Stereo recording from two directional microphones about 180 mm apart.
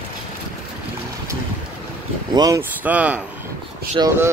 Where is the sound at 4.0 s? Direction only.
20° right (ahead or behind).